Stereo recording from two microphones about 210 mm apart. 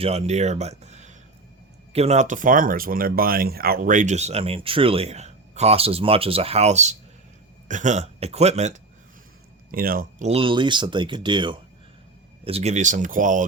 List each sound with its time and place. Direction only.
0.0 s speech: 30° right (ahead or behind)
9.7 s speech: 45° right (ahead or behind)
10.2 s speech: 25° right (ahead or behind)